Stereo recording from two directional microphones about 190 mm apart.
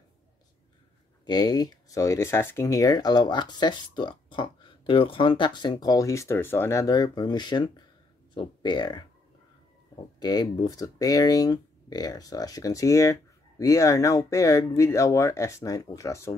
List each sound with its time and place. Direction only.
1.2 s speech: 20° left (ahead or behind)
10.2 s speech: 20° left (ahead or behind)